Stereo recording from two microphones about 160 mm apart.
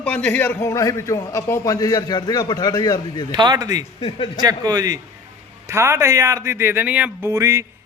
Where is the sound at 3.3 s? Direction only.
25° right (ahead or behind).